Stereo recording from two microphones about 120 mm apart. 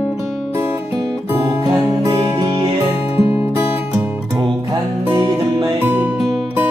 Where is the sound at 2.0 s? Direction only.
30° right (ahead or behind).